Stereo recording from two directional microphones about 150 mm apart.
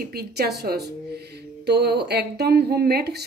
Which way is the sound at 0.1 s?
90° right.